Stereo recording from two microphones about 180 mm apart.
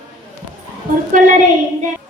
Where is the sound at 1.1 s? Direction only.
50° right (ahead or behind).